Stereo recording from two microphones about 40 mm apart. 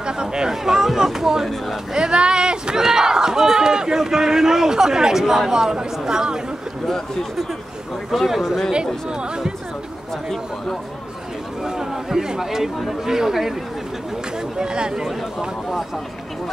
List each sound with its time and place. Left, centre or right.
0.0 s a sound: centre
2.0 s speech: centre
8.1 s speech: centre
11.6 s speech: centre
14.6 s speech: right